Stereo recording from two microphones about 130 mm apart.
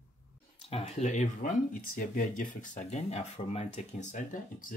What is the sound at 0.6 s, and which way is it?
Speech, 55° left (ahead or behind).